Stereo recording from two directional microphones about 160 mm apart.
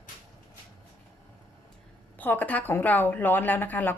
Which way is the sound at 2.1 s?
10° left (ahead or behind).